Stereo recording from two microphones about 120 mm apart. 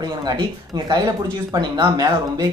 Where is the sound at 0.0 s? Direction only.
35° right (ahead or behind).